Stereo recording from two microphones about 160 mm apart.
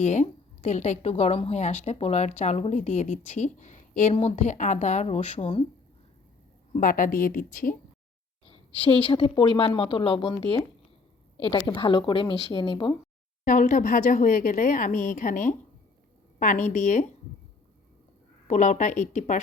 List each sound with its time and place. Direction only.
0.0 s a woman's voice: 45° left (ahead or behind)
4.1 s a woman's voice: 40° left (ahead or behind)
6.7 s speech: 60° left (ahead or behind)
8.8 s speech: 30° left (ahead or behind)
11.5 s speech: 30° left (ahead or behind)
13.4 s a woman's voice: 55° left (ahead or behind)
18.4 s a woman's voice: 50° left (ahead or behind)